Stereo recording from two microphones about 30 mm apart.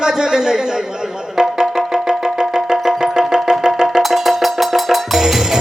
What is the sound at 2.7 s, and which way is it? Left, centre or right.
Music, centre.